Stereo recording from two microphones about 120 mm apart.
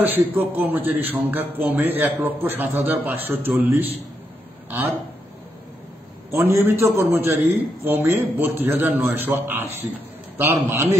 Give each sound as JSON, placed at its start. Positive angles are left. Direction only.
{"t": 0.0, "sound": "a man's voice", "side_deg": -15}
{"t": 6.3, "sound": "a man's voice", "side_deg": -20}